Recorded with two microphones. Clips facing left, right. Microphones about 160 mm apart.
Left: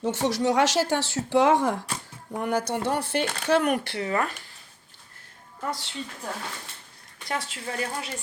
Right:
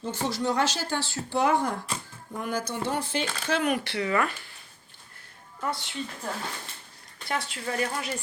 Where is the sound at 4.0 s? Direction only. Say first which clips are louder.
Right 1 dB; 35° left (ahead or behind).